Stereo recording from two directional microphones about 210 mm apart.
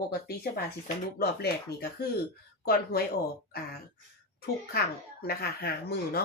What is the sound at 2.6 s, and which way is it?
Speech, 45° left (ahead or behind).